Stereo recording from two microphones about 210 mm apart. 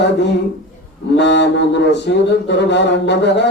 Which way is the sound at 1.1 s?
55° left (ahead or behind).